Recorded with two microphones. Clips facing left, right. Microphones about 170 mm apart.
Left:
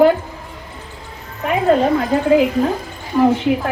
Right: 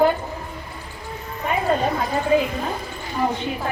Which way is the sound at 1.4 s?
90° left.